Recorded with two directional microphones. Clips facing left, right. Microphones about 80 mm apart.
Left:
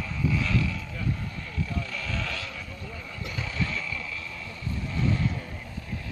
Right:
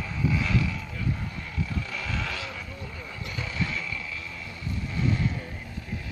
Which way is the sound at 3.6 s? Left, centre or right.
Centre.